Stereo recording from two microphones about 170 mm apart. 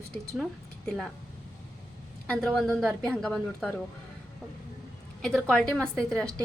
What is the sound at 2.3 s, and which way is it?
A woman's voice, 5° left (ahead or behind).